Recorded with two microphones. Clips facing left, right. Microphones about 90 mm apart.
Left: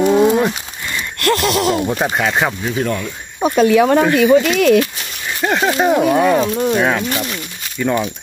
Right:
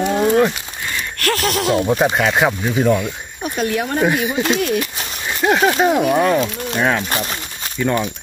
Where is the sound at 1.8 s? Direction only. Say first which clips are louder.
Right 2 dB; 5° right (ahead or behind).